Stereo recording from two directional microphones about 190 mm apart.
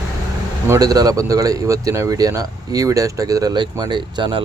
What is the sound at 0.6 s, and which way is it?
Speech, 15° right (ahead or behind).